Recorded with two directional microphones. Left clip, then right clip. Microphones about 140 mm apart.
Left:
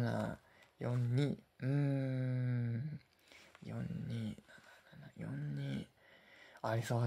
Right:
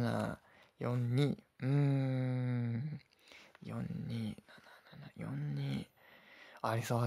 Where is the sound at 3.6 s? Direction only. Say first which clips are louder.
Right 2 dB; 50° right (ahead or behind).